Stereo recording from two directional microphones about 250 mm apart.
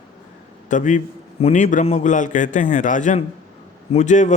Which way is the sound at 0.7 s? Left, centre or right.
Left.